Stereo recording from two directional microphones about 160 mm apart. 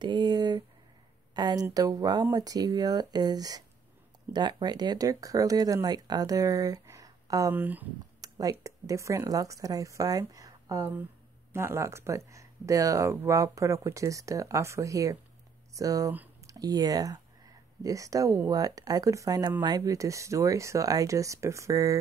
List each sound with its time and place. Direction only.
0.0 s a sound: 25° right (ahead or behind)
1.3 s speech: 25° right (ahead or behind)
7.5 s speech: 10° right (ahead or behind)
8.2 s speech: 20° right (ahead or behind)